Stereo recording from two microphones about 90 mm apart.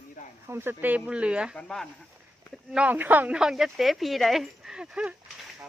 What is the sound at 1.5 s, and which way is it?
Speech, 5° left (ahead or behind).